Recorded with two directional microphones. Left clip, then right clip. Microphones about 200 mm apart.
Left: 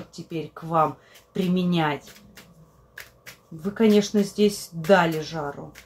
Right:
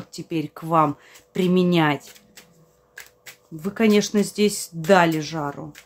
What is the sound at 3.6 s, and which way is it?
Speech, 40° right (ahead or behind).